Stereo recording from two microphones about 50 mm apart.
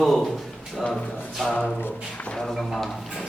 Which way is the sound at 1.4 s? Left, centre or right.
Centre.